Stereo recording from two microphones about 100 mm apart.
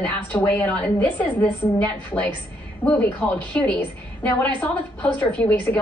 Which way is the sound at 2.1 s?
15° left (ahead or behind).